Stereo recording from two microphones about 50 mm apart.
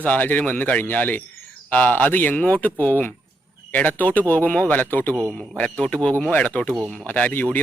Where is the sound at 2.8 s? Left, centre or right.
Left.